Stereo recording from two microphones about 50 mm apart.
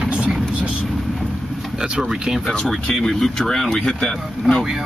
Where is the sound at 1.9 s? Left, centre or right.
Centre.